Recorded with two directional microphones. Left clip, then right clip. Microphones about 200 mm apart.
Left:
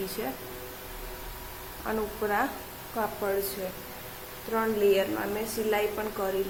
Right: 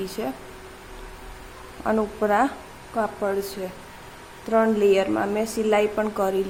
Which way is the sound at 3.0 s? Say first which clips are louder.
Right 5 dB; 25° right (ahead or behind).